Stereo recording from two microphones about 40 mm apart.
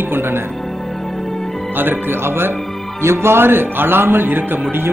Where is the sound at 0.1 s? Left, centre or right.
Right.